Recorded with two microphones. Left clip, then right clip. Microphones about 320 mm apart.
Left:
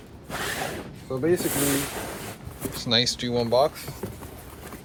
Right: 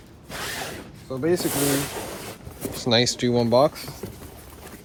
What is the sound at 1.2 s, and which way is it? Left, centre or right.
Boat, centre.